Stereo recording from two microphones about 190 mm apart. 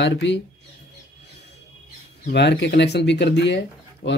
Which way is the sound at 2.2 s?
60° left (ahead or behind).